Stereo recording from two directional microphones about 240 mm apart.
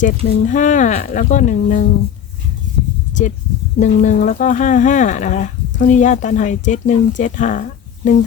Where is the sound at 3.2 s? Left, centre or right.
Left.